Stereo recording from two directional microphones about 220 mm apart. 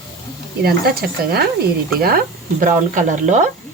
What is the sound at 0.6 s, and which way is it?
Speech, 45° right (ahead or behind).